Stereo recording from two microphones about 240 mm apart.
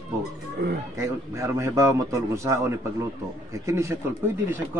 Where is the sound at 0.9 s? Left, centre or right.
Centre.